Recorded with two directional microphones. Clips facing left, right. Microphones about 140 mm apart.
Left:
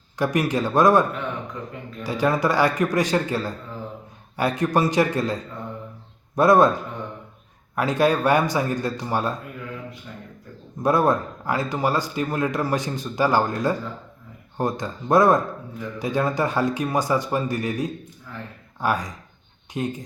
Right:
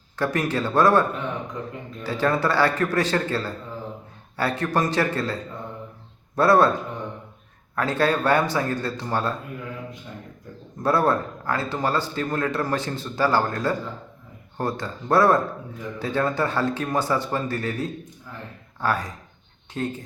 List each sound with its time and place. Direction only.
0.2 s a man's voice: 15° left (ahead or behind)
2.0 s a man's voice: 15° left (ahead or behind)
7.8 s a man's voice: 15° left (ahead or behind)
10.8 s a man's voice: 15° left (ahead or behind)